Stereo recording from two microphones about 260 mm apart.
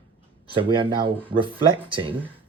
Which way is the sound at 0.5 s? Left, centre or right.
Centre.